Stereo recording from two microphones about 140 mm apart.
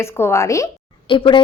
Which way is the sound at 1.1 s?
35° left (ahead or behind).